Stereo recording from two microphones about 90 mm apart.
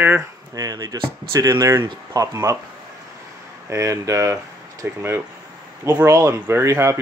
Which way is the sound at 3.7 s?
35° right (ahead or behind).